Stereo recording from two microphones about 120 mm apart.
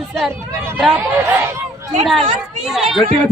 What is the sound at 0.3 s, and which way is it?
Speech, 20° right (ahead or behind).